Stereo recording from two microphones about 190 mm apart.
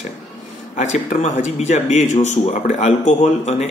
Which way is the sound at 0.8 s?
40° left (ahead or behind).